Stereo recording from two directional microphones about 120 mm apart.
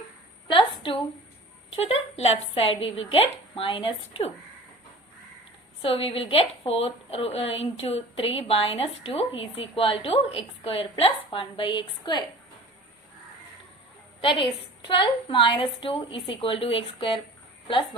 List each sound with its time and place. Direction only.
0.4 s a sound: 45° left (ahead or behind)
1.7 s speech: 55° left (ahead or behind)
5.8 s speech: 50° left (ahead or behind)
14.2 s a woman's voice: 45° left (ahead or behind)